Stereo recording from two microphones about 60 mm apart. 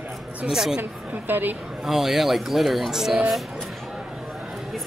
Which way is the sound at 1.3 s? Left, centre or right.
Right.